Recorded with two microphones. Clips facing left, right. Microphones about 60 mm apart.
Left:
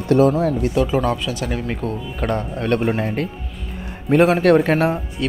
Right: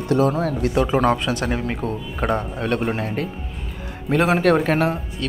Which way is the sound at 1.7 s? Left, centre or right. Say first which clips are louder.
Left 1 dB; centre.